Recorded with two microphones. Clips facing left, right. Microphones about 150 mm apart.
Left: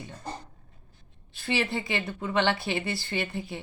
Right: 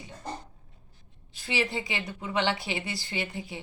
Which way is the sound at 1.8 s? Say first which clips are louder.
Left 4 dB; 55° left (ahead or behind).